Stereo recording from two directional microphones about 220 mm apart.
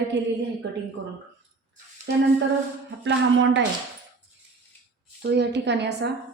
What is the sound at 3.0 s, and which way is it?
Speech, 55° right (ahead or behind).